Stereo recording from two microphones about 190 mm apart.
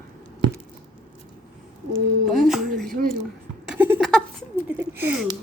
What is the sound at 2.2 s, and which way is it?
Speech, centre (ahead or behind).